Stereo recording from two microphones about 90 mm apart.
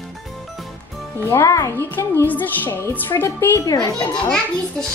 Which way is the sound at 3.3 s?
40° left (ahead or behind).